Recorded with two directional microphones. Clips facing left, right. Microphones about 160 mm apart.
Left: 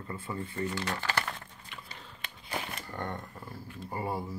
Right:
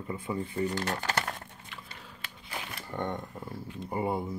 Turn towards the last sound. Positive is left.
turn(degrees=-20)  # may be behind; listen again after turning